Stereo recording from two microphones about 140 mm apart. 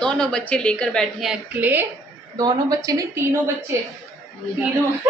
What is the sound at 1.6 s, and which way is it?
Speech, 15° right (ahead or behind).